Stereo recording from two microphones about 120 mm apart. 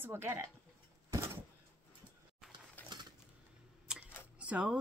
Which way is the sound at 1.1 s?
20° right (ahead or behind).